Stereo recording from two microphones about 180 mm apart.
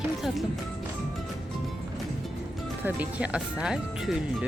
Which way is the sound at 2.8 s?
10° right (ahead or behind).